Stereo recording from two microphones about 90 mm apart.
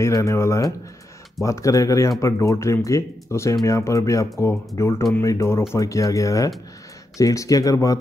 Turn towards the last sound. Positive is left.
turn(degrees=40)  # may be behind; listen again after turning